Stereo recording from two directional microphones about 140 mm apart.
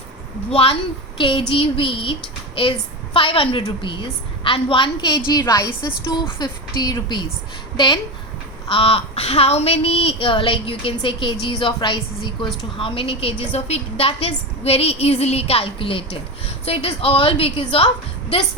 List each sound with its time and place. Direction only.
0.5 s a woman's voice: 40° left (ahead or behind)
8.7 s a woman's voice: 40° left (ahead or behind)